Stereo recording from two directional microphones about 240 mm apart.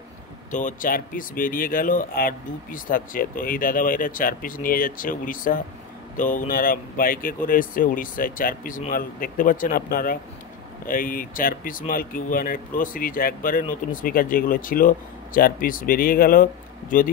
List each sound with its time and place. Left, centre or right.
0.5 s speech: left